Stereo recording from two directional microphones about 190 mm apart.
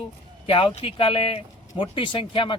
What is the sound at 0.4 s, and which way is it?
A man's voice, 25° left (ahead or behind).